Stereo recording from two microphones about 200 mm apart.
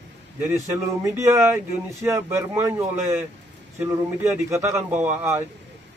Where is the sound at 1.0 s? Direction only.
15° right (ahead or behind).